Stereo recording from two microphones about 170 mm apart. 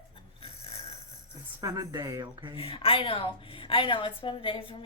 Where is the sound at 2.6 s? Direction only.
35° left (ahead or behind).